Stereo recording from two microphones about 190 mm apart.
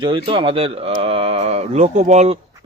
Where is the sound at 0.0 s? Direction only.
25° right (ahead or behind).